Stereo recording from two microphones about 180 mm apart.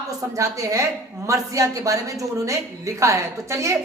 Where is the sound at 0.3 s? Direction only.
15° right (ahead or behind).